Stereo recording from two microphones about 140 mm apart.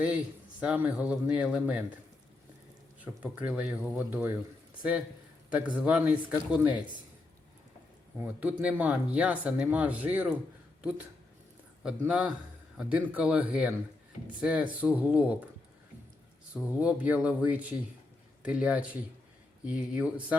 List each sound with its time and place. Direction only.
0.6 s speech: 10° right (ahead or behind)
3.0 s speech: 10° right (ahead or behind)
5.5 s speech: 10° right (ahead or behind)
8.2 s speech: 10° right (ahead or behind)
11.8 s speech: 5° right (ahead or behind)
16.6 s speech: 10° right (ahead or behind)